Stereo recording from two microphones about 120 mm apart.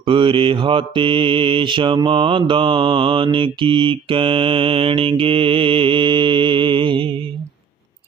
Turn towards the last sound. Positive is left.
turn(degrees=-45)  # may be behind; listen again after turning